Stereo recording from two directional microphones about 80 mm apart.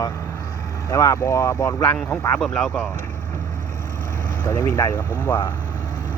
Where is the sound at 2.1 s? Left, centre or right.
Centre.